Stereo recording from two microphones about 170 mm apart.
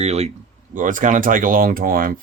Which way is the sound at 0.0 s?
40° right (ahead or behind).